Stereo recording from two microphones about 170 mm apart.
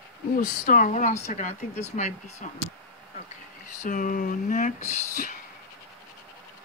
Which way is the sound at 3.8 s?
50° left (ahead or behind).